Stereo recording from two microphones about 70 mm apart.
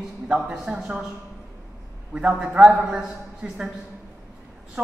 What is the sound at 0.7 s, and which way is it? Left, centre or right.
Speech, centre.